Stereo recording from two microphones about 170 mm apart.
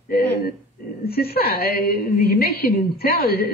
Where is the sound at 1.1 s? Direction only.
65° left (ahead or behind).